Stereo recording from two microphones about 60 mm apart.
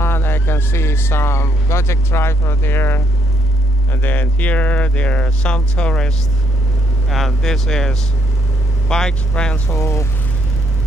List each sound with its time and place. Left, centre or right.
0.0 s speech: left; by 6.1 s centre
7.1 s speech: centre
9.7 s speech: left